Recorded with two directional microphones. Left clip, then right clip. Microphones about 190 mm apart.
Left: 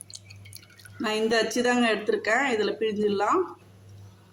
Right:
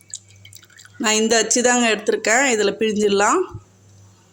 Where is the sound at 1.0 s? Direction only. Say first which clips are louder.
Right 7 dB; 45° right (ahead or behind).